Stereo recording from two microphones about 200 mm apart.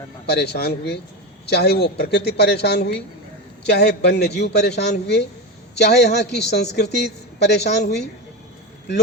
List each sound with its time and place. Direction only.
0.3 s speech: 55° left (ahead or behind)